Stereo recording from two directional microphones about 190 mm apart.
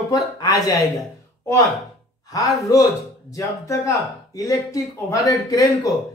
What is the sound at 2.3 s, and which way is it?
A man's voice, 20° left (ahead or behind).